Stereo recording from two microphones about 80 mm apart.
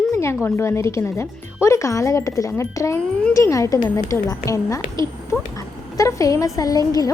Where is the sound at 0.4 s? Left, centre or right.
Left.